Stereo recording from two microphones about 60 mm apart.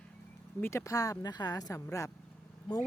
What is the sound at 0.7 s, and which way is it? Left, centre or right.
Speech, left.